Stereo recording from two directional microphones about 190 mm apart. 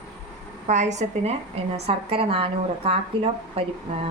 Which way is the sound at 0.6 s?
40° right (ahead or behind).